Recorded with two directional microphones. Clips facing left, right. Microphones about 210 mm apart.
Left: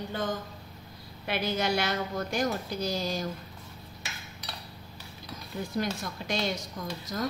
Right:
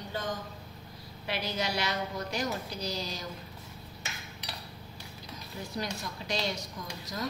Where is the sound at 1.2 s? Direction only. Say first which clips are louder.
Left 4 dB; 55° left (ahead or behind).